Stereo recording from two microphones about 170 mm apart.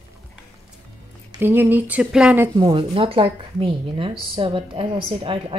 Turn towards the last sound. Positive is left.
turn(degrees=-30)  # may be behind; listen again after turning